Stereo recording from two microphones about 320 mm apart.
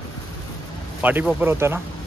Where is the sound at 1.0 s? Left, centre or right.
Centre.